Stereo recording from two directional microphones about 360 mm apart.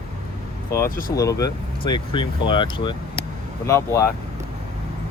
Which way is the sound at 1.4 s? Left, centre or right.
Centre.